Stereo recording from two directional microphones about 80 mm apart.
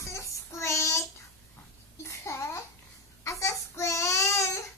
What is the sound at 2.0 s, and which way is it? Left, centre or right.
Babbling, left.